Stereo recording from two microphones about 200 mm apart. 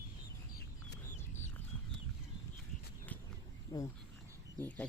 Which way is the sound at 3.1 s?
10° left (ahead or behind).